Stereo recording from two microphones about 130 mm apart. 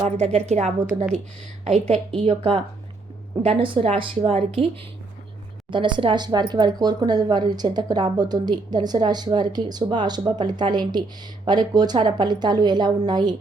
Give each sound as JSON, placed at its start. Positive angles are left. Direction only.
{"t": 0.2, "sound": "a woman's voice", "side_deg": -55}
{"t": 5.7, "sound": "speech", "side_deg": -40}